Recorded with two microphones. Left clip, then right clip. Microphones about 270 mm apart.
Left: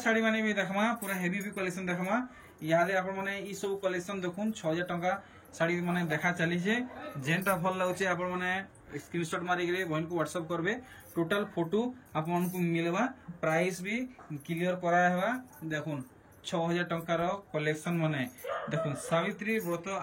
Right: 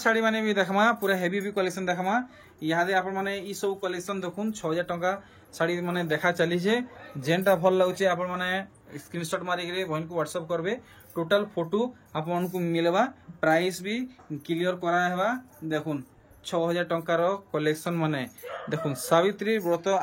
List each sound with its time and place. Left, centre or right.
0.0 s speech: centre
1.1 s speech: right
1.5 s speech: centre